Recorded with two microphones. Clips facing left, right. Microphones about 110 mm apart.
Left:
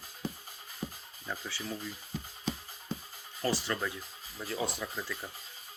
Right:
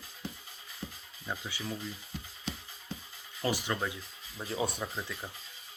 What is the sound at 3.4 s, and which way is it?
Speech, 15° right (ahead or behind).